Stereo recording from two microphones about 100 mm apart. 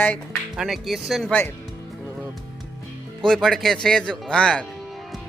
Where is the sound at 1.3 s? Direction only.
15° left (ahead or behind).